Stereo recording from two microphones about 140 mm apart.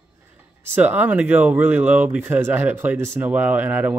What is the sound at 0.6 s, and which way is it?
Speech, 15° right (ahead or behind).